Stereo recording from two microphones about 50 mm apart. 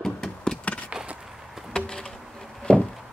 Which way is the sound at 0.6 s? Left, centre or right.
Left.